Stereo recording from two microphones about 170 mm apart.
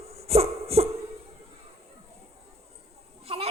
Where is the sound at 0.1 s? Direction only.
35° right (ahead or behind).